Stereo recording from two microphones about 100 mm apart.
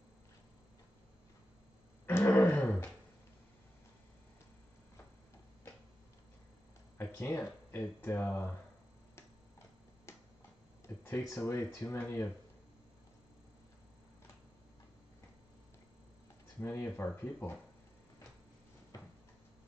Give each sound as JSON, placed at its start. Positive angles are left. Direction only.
{"t": 2.0, "sound": "a sound", "side_deg": 20}
{"t": 7.0, "sound": "speech", "side_deg": 25}
{"t": 10.1, "sound": "tick-tock", "side_deg": 30}
{"t": 10.9, "sound": "a sound", "side_deg": 30}
{"t": 11.2, "sound": "speech", "side_deg": 25}
{"t": 16.5, "sound": "speech", "side_deg": 25}